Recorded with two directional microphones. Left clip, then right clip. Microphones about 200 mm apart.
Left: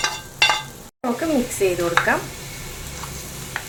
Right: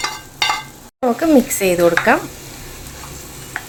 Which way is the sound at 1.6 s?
60° right (ahead or behind).